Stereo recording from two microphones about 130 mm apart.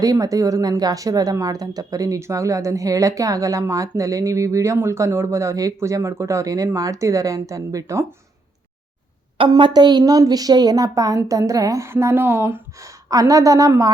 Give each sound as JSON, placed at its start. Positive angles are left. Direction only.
{"t": 0.0, "sound": "speech", "side_deg": -30}
{"t": 9.5, "sound": "speech", "side_deg": -35}